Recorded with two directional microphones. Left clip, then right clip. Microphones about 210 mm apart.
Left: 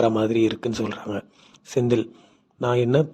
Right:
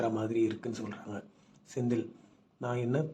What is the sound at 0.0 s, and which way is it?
Speech, 45° left (ahead or behind).